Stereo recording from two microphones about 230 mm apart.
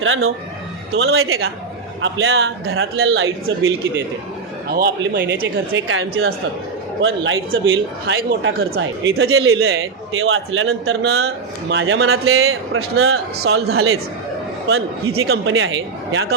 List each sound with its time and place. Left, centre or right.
0.0 s a man's voice: right
4.7 s a man's voice: right
15.2 s a man's voice: right